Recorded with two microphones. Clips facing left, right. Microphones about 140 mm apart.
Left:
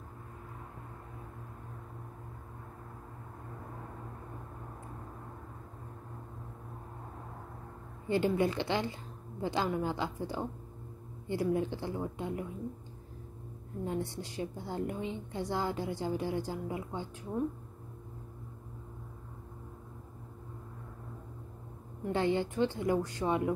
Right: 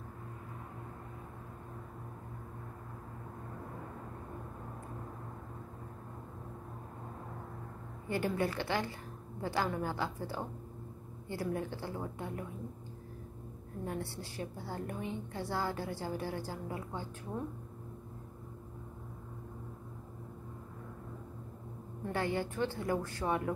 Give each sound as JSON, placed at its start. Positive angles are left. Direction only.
{"t": 8.1, "sound": "a woman's voice", "side_deg": 20}
{"t": 13.8, "sound": "a woman's voice", "side_deg": 20}
{"t": 22.0, "sound": "a woman's voice", "side_deg": 20}